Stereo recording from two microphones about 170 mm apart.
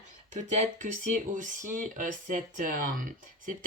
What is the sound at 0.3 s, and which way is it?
Speech, 45° right (ahead or behind).